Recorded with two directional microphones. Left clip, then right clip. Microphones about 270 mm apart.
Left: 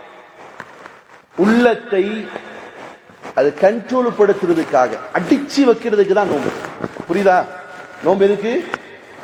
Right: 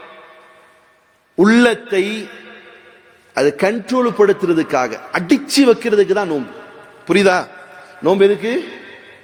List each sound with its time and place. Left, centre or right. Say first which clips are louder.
1.5 s a man's voice: even; right
3.3 s a man's voice: left 2 dB; right